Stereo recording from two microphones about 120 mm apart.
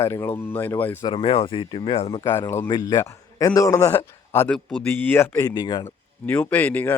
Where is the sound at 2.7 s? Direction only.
35° left (ahead or behind).